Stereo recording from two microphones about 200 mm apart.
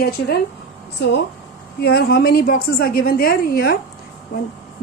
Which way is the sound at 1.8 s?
55° left (ahead or behind).